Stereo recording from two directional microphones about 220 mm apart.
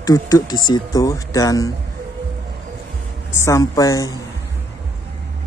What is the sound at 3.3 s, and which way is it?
Speech, 15° left (ahead or behind).